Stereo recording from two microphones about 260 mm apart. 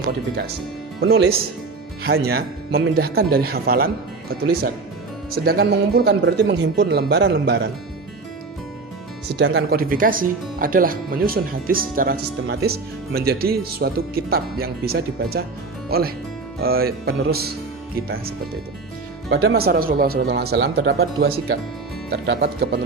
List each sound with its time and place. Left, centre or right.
1.0 s speech: right
5.5 s speech: right
9.3 s speech: right
19.3 s speech: right